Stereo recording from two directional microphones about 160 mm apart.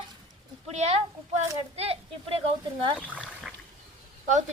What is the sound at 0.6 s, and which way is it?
Speech, 40° right (ahead or behind).